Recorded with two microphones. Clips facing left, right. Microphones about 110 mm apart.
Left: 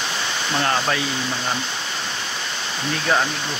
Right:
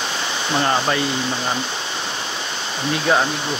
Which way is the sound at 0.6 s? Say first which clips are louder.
Right 2 dB; 5° right (ahead or behind).